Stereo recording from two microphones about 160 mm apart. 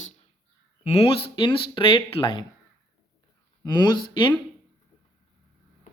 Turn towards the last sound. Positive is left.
turn(degrees=30)  # may be behind; listen again after turning